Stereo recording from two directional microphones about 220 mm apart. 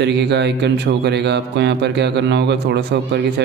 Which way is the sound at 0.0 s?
50° right (ahead or behind).